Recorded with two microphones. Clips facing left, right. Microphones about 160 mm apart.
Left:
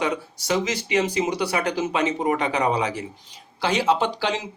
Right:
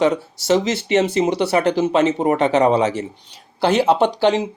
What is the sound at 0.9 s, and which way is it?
A man's voice, 25° right (ahead or behind).